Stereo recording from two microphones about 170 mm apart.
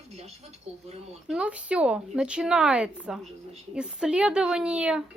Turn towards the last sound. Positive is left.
turn(degrees=-5)  # may be behind; listen again after turning